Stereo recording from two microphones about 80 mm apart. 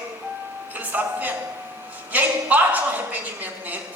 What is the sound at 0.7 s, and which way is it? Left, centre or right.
A man's voice, right.